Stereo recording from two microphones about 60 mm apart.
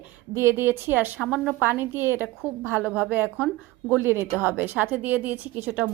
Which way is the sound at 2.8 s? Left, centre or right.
Right.